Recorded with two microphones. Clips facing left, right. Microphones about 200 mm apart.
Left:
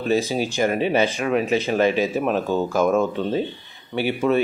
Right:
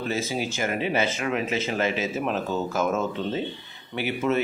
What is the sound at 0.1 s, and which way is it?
Speech, 15° left (ahead or behind).